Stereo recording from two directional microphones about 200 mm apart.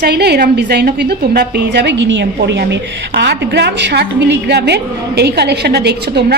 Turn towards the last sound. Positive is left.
turn(degrees=-55)  # may be behind; listen again after turning